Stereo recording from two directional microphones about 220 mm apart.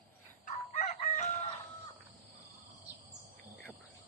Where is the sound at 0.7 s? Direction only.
35° left (ahead or behind).